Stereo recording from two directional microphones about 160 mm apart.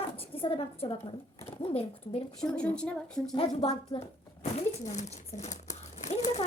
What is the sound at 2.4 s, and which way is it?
Speech, 5° left (ahead or behind).